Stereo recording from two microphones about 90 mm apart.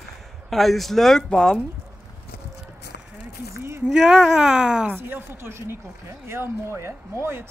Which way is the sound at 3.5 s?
30° right (ahead or behind).